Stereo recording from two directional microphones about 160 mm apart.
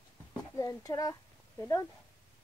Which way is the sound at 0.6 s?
20° left (ahead or behind).